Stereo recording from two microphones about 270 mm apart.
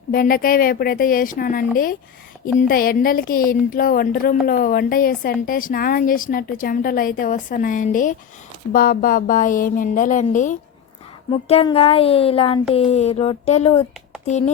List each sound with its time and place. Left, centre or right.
0.1 s a woman's voice: left